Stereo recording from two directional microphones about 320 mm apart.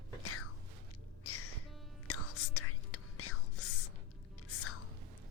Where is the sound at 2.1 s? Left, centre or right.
Left.